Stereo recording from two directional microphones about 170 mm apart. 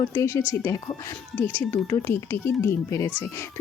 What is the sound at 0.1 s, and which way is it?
Speech, 15° left (ahead or behind).